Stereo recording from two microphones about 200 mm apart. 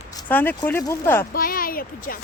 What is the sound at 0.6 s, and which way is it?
Speech, 10° left (ahead or behind).